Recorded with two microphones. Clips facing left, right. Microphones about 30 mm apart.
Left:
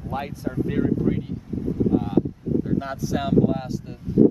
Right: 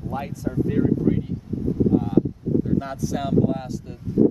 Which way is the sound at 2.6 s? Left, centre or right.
Centre.